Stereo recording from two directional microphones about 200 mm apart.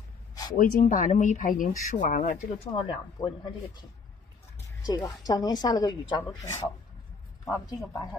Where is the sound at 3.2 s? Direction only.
20° left (ahead or behind).